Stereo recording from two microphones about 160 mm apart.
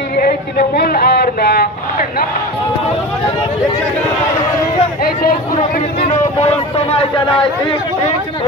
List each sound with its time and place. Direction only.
0.2 s speech: 70° left (ahead or behind)
6.4 s speech: 35° left (ahead or behind)